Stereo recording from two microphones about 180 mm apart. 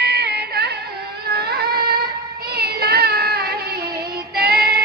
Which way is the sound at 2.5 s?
60° right (ahead or behind).